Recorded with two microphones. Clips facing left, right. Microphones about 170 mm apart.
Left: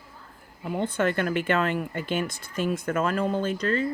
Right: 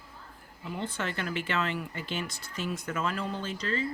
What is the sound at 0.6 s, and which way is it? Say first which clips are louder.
Speech: left 9 dB; 55° left (ahead or behind).